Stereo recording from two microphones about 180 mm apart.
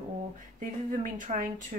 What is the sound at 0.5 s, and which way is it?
Speech, 45° right (ahead or behind).